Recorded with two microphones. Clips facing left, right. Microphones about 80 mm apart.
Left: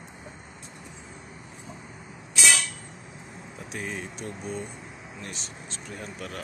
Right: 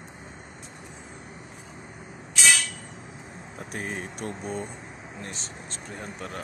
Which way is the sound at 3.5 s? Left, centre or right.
Right.